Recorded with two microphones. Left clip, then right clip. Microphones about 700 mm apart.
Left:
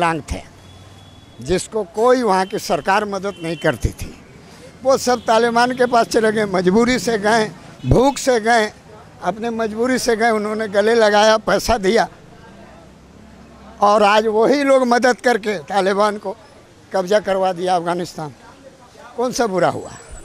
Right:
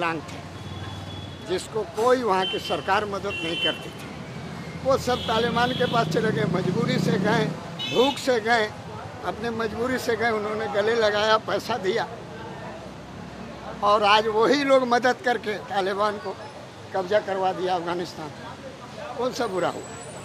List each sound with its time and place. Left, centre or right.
0.0 s speech: left
1.5 s a man's voice: left
4.8 s a man's voice: left
13.8 s a man's voice: left
19.2 s a man's voice: left